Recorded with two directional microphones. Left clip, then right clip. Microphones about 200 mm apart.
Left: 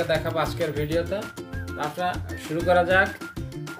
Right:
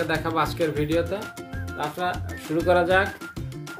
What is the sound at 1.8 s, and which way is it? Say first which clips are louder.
Music: even; 30° right (ahead or behind).